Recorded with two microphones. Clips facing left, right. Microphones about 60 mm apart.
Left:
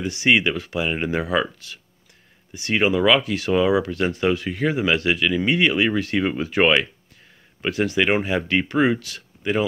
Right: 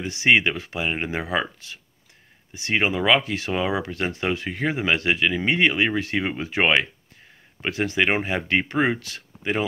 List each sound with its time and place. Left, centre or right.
0.0 s speech: right